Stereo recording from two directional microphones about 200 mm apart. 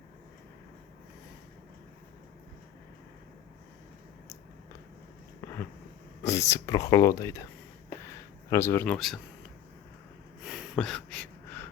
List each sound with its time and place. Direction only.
6.2 s speech: 15° left (ahead or behind)
8.4 s speech: 15° left (ahead or behind)
10.4 s a sound: centre (ahead or behind)